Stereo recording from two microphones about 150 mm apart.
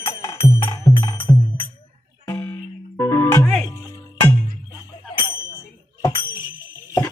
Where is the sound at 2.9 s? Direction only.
15° left (ahead or behind).